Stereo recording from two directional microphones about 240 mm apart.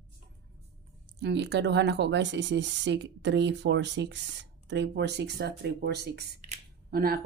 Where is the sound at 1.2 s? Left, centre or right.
Right.